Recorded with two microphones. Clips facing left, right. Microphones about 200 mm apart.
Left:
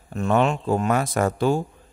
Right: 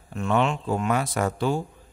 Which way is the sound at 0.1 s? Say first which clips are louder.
Left 3 dB; 40° left (ahead or behind).